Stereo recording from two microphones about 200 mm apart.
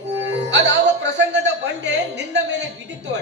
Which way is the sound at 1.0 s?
60° right (ahead or behind).